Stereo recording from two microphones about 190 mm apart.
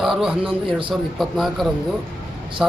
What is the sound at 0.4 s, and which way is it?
Speech, 25° right (ahead or behind).